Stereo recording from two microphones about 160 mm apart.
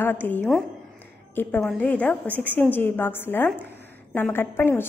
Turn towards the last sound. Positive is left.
turn(degrees=15)  # may be behind; listen again after turning